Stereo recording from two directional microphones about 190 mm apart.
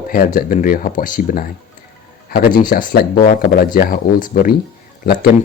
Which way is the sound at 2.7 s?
45° left (ahead or behind).